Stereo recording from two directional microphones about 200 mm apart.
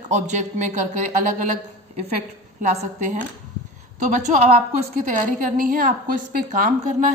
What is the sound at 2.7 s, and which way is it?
A woman's voice, 35° right (ahead or behind).